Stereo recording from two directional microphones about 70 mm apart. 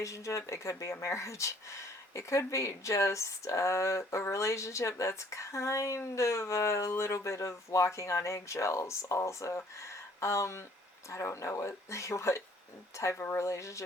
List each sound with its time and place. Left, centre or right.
0.0 s speech: left